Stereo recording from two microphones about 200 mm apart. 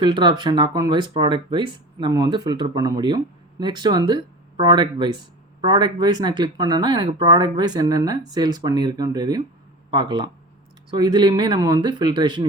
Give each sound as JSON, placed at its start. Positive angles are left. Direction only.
{"t": 0.0, "sound": "speech", "side_deg": -25}